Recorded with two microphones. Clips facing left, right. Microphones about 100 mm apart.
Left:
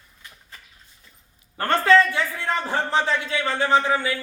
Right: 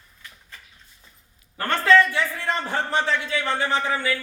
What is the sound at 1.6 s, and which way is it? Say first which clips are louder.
A man's voice: left 1 dB; 30° left (ahead or behind).